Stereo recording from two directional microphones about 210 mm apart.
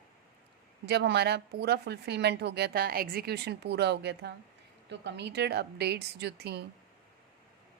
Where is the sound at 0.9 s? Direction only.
50° right (ahead or behind).